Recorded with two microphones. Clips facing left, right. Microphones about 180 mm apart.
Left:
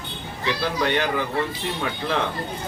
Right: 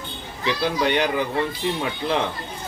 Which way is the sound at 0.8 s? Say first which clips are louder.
Right 1 dB; 15° right (ahead or behind).